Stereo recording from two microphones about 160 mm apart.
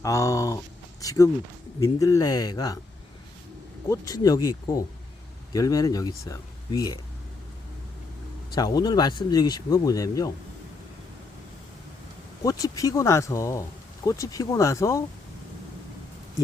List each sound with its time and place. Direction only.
0.0 s speech: 20° left (ahead or behind)
3.8 s speech: 20° left (ahead or behind)
8.5 s speech: 25° left (ahead or behind)
12.5 s speech: 20° left (ahead or behind)